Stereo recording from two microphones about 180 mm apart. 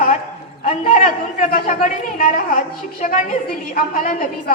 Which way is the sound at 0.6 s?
45° left (ahead or behind).